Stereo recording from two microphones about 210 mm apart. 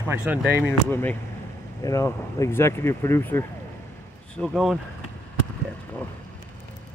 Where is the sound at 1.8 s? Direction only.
15° left (ahead or behind).